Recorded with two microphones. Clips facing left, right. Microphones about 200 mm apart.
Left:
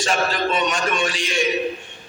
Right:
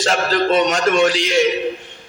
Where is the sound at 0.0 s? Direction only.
85° right.